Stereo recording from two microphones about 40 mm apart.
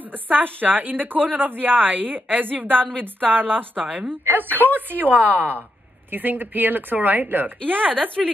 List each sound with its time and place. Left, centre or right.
0.3 s a woman's voice: right
3.8 s a woman's voice: right
4.3 s a woman's voice: right
8.2 s a woman's voice: centre